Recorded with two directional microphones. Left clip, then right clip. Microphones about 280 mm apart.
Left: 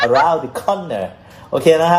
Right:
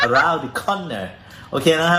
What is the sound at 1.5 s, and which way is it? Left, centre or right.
Speech, right.